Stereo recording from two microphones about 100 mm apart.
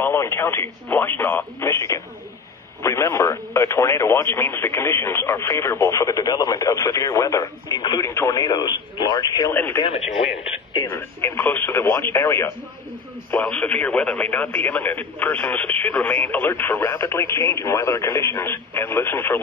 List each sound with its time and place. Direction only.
0.0 s speech: 25° left (ahead or behind); by 8.0 s 40° left (ahead or behind)
8.0 s speech: 30° left (ahead or behind)
9.5 s speech: 20° left (ahead or behind)
10.9 s speech: 25° left (ahead or behind)
13.5 s speech: 15° left (ahead or behind)